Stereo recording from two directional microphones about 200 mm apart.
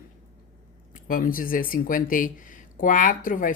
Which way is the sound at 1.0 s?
45° left (ahead or behind).